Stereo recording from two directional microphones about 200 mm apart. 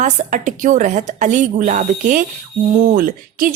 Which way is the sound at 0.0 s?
40° right (ahead or behind).